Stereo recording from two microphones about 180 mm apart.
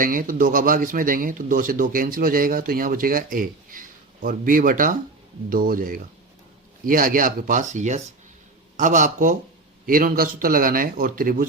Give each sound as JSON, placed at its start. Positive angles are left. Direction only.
{"t": 0.0, "sound": "a man's voice", "side_deg": -50}